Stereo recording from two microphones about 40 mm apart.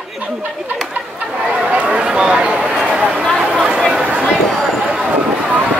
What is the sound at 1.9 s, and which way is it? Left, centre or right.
Speech, right.